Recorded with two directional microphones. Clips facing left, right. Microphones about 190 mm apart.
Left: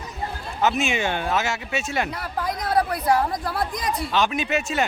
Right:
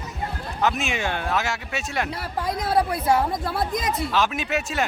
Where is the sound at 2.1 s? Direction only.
30° right (ahead or behind).